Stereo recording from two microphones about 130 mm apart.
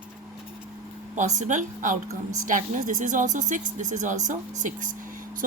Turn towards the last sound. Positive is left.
turn(degrees=-90)